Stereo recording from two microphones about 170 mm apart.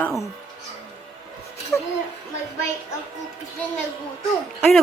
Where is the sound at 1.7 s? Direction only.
15° left (ahead or behind).